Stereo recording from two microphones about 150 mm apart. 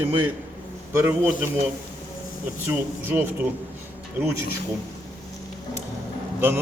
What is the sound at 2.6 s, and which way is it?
Speech, 15° right (ahead or behind).